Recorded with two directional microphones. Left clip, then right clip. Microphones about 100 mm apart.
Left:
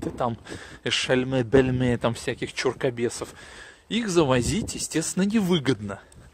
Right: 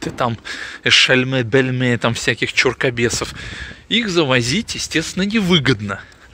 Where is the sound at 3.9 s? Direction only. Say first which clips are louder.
Right 6 dB; 80° left.